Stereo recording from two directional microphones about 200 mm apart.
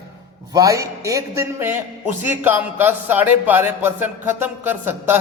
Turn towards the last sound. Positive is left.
turn(degrees=-10)  # may be behind; listen again after turning